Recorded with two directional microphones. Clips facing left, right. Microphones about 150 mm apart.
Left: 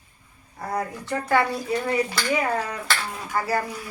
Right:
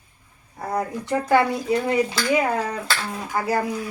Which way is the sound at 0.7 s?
20° right (ahead or behind).